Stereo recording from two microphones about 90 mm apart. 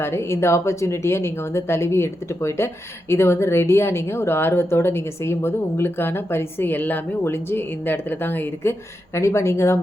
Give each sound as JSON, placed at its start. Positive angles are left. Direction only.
{"t": 0.0, "sound": "speech", "side_deg": 30}